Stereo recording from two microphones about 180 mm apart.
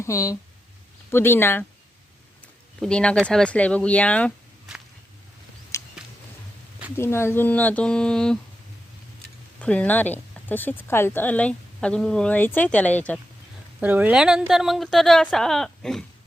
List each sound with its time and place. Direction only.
0.0 s speech: 15° left (ahead or behind)
2.8 s speech: 5° left (ahead or behind)
5.7 s a sound: 15° left (ahead or behind)
6.9 s speech: 15° left (ahead or behind)
9.6 s speech: 5° left (ahead or behind)
13.8 s speech: 10° right (ahead or behind)